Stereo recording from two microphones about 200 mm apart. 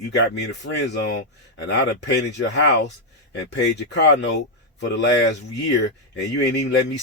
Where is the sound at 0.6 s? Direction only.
60° left (ahead or behind).